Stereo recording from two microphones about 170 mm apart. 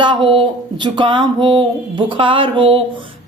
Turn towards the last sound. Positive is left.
turn(degrees=-30)  # may be behind; listen again after turning